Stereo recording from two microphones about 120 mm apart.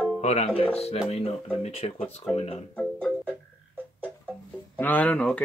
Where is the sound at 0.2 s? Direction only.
65° left (ahead or behind).